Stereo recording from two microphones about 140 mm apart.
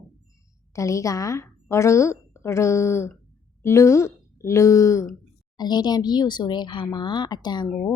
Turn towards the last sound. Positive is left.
turn(degrees=15)  # may be behind; listen again after turning